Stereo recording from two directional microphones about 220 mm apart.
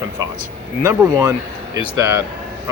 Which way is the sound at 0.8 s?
15° right (ahead or behind).